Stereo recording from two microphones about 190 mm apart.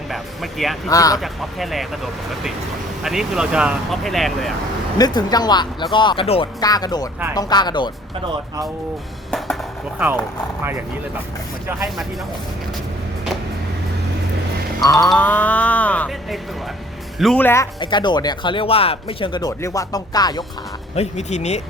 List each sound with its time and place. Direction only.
0.1 s speech: centre (ahead or behind)
0.9 s speech: 20° left (ahead or behind)
1.2 s speech: centre (ahead or behind)
3.0 s speech: centre (ahead or behind)
4.9 s speech: 20° left (ahead or behind)
14.8 s speech: 20° left (ahead or behind)
17.7 s speech: 25° left (ahead or behind)
20.9 s speech: 35° left (ahead or behind)